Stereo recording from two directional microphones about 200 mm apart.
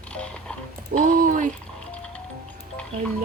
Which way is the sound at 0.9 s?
40° right (ahead or behind).